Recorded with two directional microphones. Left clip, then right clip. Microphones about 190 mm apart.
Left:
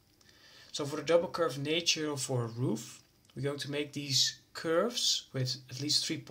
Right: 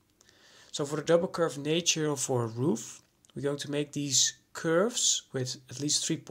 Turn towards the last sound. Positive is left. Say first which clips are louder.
# right 1 dB
turn(degrees=-50)  # may be behind; listen again after turning